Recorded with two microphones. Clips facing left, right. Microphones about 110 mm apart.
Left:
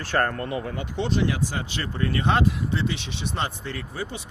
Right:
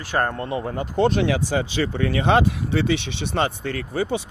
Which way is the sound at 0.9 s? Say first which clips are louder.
Right 7 dB; 55° right (ahead or behind).